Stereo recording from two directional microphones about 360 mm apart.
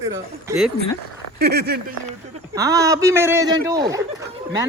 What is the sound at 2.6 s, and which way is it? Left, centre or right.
A man's voice, centre.